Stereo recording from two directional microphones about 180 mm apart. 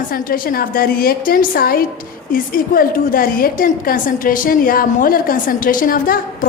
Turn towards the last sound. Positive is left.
turn(degrees=50)  # may be behind; listen again after turning